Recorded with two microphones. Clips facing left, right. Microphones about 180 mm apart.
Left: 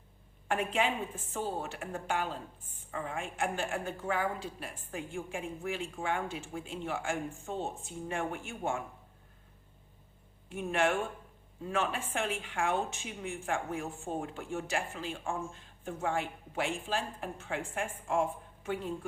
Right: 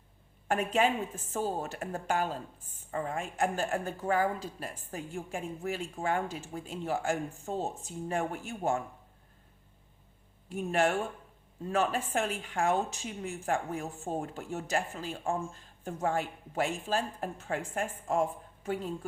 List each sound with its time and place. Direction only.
0.4 s speech: 40° right (ahead or behind)
10.5 s speech: 40° right (ahead or behind)